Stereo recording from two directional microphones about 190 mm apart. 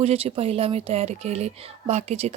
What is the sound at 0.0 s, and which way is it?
Speech, 35° right (ahead or behind).